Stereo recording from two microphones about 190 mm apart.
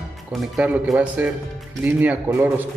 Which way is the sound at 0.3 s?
Centre (ahead or behind).